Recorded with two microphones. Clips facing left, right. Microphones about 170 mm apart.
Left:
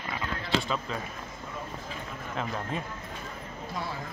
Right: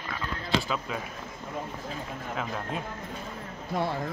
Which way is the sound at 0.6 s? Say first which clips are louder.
Even; 5° right (ahead or behind).